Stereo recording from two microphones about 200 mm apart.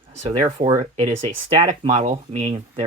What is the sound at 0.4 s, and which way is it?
Speech, 15° right (ahead or behind).